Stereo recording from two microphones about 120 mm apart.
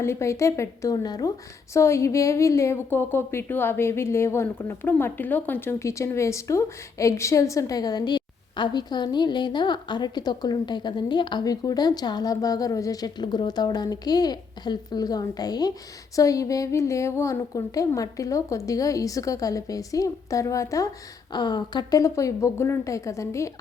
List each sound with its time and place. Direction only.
0.0 s a woman's voice: 25° left (ahead or behind)
21.3 s a woman's voice: 40° left (ahead or behind)